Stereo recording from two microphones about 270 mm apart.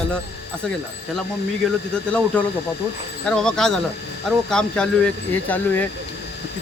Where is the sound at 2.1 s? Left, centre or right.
Centre.